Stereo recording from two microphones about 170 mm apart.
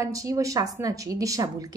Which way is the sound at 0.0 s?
20° right (ahead or behind).